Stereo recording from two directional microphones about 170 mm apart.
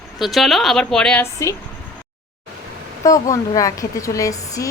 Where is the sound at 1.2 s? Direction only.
15° left (ahead or behind).